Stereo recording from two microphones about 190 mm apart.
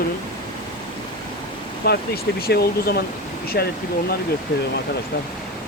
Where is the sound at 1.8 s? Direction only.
55° left (ahead or behind).